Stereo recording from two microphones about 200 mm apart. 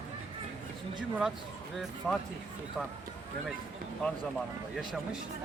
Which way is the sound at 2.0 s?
5° left (ahead or behind).